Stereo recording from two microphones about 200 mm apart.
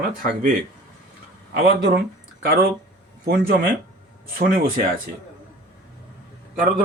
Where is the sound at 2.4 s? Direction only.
50° right (ahead or behind).